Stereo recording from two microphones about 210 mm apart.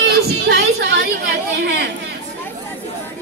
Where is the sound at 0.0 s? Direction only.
50° right (ahead or behind).